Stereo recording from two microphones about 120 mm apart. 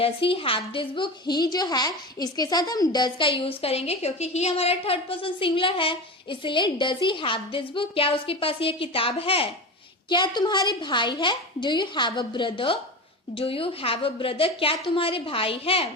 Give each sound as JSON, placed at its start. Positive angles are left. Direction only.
{"t": 0.0, "sound": "a woman's voice", "side_deg": 50}
{"t": 10.1, "sound": "a woman's voice", "side_deg": 40}